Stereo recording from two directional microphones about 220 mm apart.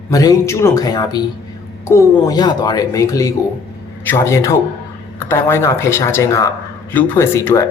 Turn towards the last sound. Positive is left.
turn(degrees=10)  # may be behind; listen again after turning